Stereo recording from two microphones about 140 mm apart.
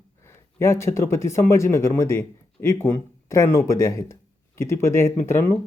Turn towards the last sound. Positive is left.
turn(degrees=20)  # may be behind; listen again after turning